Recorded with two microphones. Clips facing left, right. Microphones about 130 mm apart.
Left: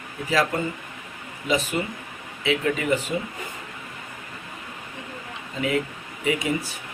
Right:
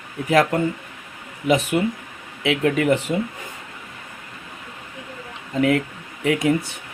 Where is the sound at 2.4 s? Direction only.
70° right (ahead or behind).